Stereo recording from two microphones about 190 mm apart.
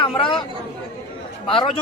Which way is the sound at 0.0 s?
25° left (ahead or behind).